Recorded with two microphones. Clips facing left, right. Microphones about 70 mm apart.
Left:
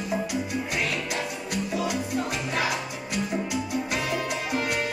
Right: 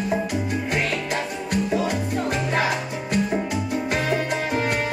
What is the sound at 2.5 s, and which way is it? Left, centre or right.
Music, right.